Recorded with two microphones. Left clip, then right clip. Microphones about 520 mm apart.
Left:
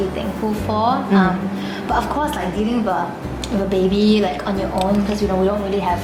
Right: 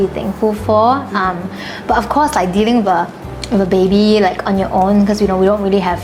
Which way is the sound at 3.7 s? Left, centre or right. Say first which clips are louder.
Right 4 dB; right.